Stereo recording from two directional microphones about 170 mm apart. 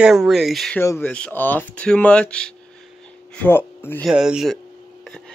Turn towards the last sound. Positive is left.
turn(degrees=-5)  # may be behind; listen again after turning